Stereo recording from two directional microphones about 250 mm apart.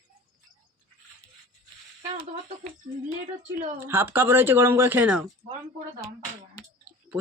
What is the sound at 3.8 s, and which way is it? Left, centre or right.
Speech, centre.